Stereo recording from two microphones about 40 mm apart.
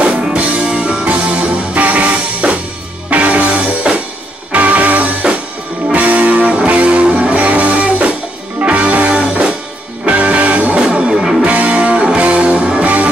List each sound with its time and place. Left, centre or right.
0.3 s music: right
3.9 s music: right
4.5 s music: right
10.8 s music: right
11.1 s music: centre
11.4 s music: right